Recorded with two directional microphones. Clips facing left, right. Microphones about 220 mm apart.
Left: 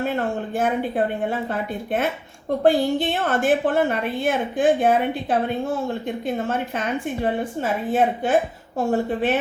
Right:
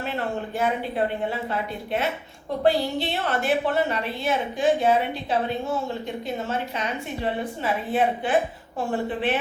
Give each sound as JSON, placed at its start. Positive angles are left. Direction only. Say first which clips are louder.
{"t": 0.5, "sound": "a woman's voice", "louder": "left 4 dB", "side_deg": 50}